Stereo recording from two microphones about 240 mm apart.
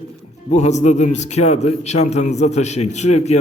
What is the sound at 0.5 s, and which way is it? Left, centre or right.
A man's voice, left.